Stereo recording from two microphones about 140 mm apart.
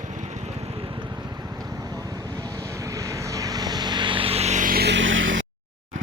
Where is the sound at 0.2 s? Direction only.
45° right (ahead or behind).